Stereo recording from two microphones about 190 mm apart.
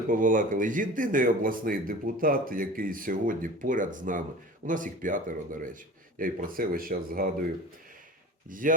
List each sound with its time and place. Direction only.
0.1 s speech: 45° right (ahead or behind)
8.4 s speech: 45° right (ahead or behind)